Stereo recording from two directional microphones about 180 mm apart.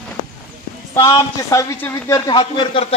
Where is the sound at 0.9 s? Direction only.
20° left (ahead or behind).